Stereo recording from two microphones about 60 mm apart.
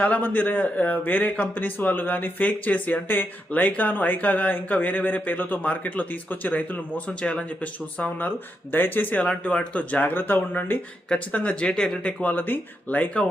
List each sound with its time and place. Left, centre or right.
0.0 s speech: left
9.2 s speech: centre; by 10.8 s left
11.3 s speech: left
12.3 s speech: left